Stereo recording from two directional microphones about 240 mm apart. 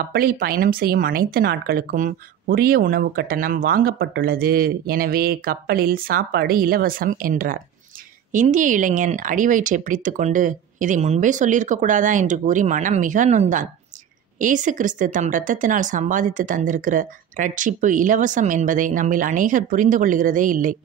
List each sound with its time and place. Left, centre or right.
0.1 s speech: right